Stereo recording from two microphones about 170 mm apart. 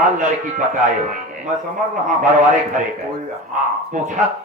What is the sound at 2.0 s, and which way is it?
Speech, 50° right (ahead or behind).